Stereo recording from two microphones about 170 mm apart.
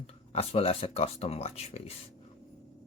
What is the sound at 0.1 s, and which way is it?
Speech, 35° left (ahead or behind).